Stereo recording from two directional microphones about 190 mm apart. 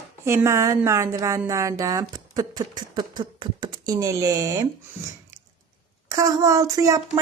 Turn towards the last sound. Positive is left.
turn(degrees=-15)  # may be behind; listen again after turning